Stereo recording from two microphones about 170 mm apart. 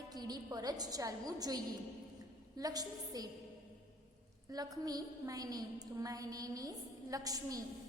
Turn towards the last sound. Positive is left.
turn(degrees=-20)  # may be behind; listen again after turning